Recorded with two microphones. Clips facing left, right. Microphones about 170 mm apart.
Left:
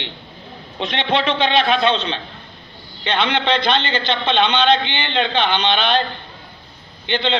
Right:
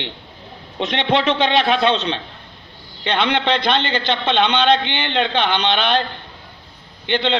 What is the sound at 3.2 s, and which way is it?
A man's voice, 55° right (ahead or behind).